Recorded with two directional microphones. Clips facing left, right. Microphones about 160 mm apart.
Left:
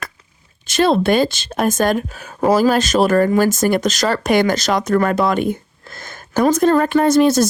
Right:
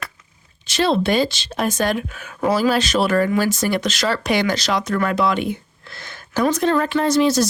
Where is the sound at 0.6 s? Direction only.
50° left (ahead or behind).